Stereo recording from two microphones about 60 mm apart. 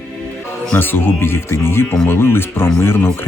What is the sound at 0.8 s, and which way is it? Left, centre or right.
Speech, left.